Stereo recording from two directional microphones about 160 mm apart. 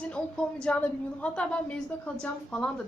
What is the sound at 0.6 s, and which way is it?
A woman's voice, 10° left (ahead or behind).